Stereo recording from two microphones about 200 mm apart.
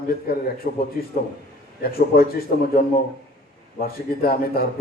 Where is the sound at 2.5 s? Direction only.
45° left (ahead or behind).